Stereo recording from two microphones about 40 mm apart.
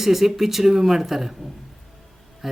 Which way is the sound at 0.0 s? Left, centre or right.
Centre.